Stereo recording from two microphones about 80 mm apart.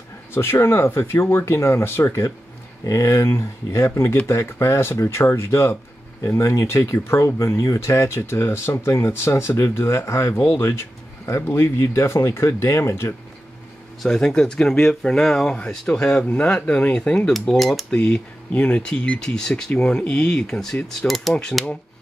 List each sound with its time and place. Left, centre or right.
0.3 s speech: left
14.0 s speech: centre
17.3 s cutlery: centre
17.9 s speech: centre
21.2 s cutlery: centre